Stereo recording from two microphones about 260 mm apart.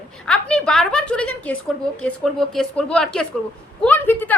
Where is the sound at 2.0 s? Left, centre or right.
Centre.